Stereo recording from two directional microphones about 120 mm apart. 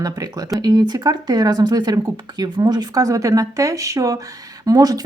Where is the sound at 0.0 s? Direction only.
30° right (ahead or behind).